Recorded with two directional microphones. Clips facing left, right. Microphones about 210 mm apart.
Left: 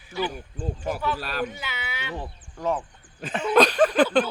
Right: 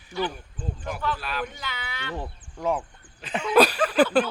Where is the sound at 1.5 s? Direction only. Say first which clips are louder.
Left 1 dB; 10° left (ahead or behind).